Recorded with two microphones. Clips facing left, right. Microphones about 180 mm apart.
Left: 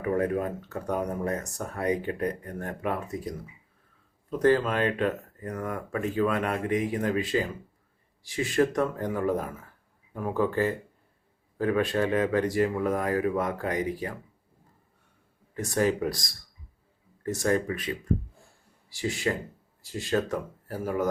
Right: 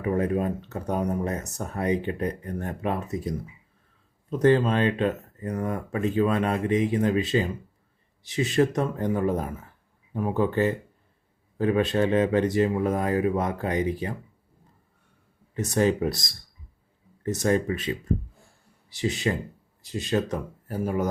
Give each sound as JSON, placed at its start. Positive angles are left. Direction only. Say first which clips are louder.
{"t": 0.0, "sound": "speech", "louder": "right 2 dB", "side_deg": -20}
{"t": 4.3, "sound": "speech", "louder": "right 2 dB", "side_deg": -25}
{"t": 15.5, "sound": "speech", "louder": "right 3 dB", "side_deg": -20}